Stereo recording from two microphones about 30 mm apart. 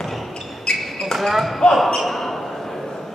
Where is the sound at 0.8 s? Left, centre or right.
Centre.